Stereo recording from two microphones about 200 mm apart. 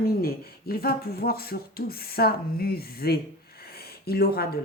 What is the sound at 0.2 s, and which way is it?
Speech, 50° left (ahead or behind).